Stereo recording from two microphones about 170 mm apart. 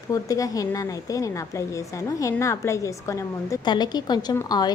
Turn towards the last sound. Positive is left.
turn(degrees=25)  # may be behind; listen again after turning